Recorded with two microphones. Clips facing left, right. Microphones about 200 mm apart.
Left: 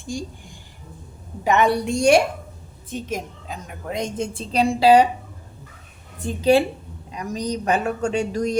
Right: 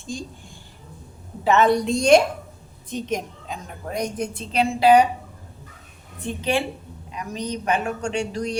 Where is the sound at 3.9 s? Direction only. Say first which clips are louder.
Even; 25° left (ahead or behind).